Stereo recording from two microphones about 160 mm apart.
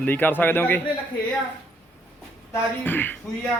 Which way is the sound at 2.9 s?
10° left (ahead or behind).